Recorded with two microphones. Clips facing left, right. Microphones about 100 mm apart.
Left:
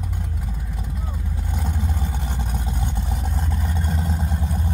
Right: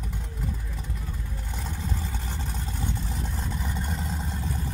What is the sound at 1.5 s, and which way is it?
Vehicle, 10° left (ahead or behind).